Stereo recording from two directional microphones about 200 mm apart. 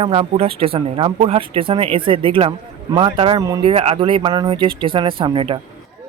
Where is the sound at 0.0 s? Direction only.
30° right (ahead or behind).